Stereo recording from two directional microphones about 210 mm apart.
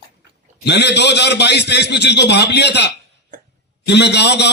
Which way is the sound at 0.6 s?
55° left (ahead or behind).